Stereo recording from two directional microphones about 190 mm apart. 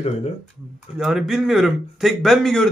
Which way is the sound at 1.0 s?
Centre (ahead or behind).